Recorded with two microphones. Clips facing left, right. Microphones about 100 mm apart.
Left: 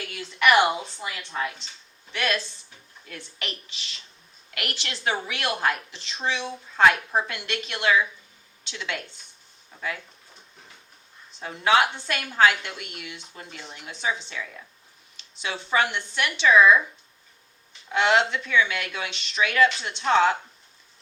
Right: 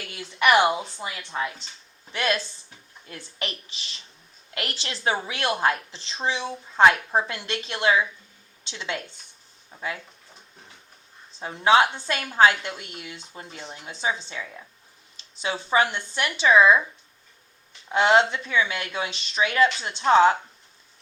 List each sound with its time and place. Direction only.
0.1 s a woman's voice: 25° right (ahead or behind)
11.3 s a woman's voice: 25° right (ahead or behind)
17.9 s a woman's voice: 30° right (ahead or behind)